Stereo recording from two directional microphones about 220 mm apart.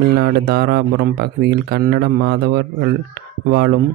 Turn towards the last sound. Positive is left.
turn(degrees=-45)  # may be behind; listen again after turning